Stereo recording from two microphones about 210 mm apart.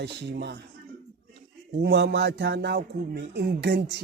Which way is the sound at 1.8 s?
50° right (ahead or behind).